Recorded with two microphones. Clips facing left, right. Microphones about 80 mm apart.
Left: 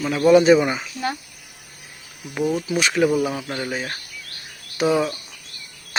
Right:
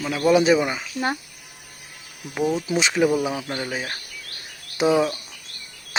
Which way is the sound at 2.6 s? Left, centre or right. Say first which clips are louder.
Left 1 dB; centre.